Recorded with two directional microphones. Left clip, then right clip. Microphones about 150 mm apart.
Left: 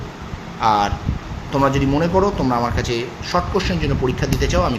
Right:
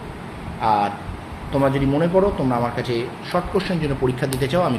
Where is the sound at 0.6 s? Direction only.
20° left (ahead or behind).